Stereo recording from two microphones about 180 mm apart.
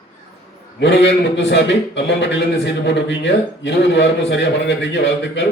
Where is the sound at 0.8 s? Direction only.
80° left.